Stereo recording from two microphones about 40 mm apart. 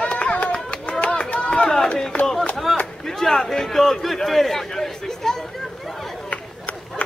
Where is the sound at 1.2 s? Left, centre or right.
Left.